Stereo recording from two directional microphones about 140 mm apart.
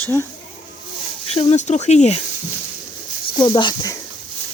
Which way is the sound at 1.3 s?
45° left (ahead or behind).